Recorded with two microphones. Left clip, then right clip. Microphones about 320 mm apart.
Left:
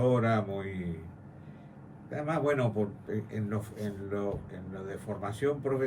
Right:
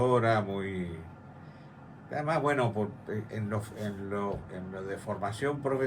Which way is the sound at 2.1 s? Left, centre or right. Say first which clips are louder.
Right 1 dB; centre.